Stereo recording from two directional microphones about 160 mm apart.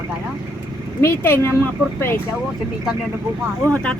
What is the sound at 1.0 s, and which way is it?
Speech, 15° left (ahead or behind).